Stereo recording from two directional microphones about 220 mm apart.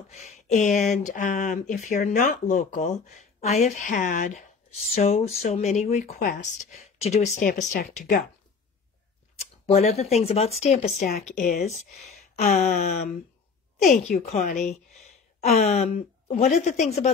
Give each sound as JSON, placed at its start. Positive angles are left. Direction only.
{"t": 0.1, "sound": "speech", "side_deg": 30}
{"t": 9.7, "sound": "speech", "side_deg": 30}